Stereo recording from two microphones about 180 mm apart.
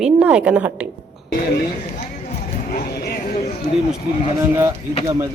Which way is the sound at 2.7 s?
55° left (ahead or behind).